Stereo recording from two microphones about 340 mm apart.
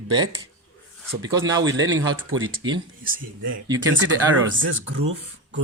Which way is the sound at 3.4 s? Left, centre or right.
Right.